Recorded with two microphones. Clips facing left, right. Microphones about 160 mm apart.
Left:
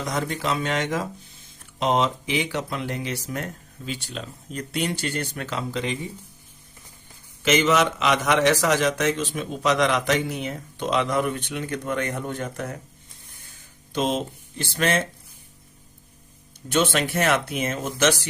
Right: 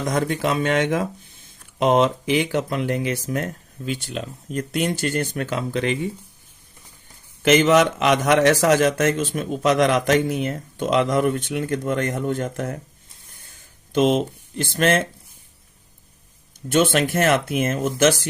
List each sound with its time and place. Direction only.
0.0 s a man's voice: 50° right (ahead or behind)
7.4 s a man's voice: 50° right (ahead or behind)
14.1 s speech: 55° right (ahead or behind)
16.7 s a man's voice: 50° right (ahead or behind)